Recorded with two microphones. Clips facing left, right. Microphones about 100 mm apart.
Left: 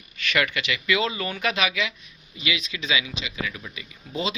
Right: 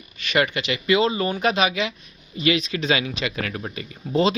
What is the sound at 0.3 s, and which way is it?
Speech, 30° right (ahead or behind).